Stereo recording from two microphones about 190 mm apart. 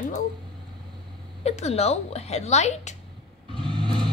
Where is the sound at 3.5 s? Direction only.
25° right (ahead or behind).